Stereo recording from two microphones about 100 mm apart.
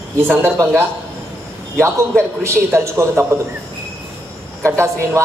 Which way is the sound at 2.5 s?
25° right (ahead or behind).